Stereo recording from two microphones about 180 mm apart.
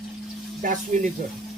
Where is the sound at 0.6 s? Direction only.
45° right (ahead or behind).